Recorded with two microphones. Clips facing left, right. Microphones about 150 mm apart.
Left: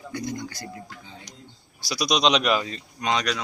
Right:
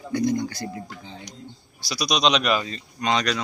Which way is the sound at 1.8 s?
15° left (ahead or behind).